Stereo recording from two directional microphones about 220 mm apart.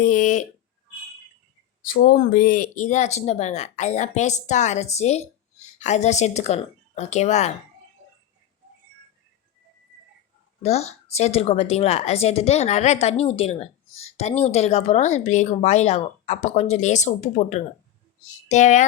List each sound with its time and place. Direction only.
0.0 s speech: 35° left (ahead or behind)
1.9 s speech: 40° left (ahead or behind)
10.6 s a woman's voice: 30° left (ahead or behind)